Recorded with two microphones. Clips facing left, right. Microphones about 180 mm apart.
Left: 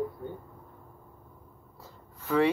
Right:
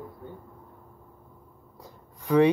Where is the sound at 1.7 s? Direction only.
15° right (ahead or behind).